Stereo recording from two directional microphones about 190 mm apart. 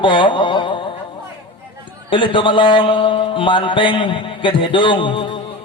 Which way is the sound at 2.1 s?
25° left (ahead or behind).